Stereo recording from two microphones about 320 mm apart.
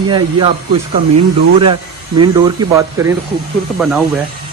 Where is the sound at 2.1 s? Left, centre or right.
Centre.